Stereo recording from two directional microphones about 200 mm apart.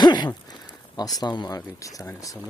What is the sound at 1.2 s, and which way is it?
Speech, 20° left (ahead or behind).